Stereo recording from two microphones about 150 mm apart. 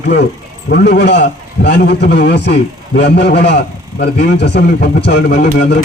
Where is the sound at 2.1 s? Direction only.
90° left.